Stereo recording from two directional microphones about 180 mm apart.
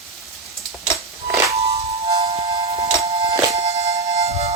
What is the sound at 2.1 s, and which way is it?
Music, 35° right (ahead or behind).